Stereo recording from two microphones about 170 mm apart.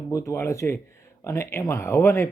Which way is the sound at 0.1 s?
15° left (ahead or behind).